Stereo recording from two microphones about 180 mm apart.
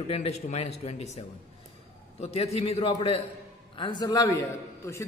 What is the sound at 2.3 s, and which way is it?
A man's voice, 35° left (ahead or behind).